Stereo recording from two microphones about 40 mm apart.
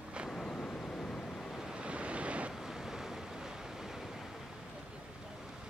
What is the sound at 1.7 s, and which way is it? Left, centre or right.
Waves, right.